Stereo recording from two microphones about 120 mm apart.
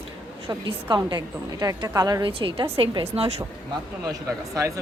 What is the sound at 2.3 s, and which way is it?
A woman's voice, 45° right (ahead or behind).